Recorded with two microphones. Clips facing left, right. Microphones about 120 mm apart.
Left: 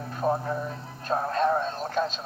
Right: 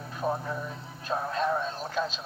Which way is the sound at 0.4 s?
40° left (ahead or behind).